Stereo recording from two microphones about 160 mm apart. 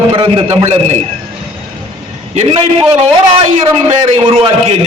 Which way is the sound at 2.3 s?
40° right (ahead or behind).